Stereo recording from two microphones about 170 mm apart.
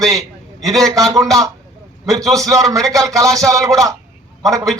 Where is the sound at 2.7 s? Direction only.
20° right (ahead or behind).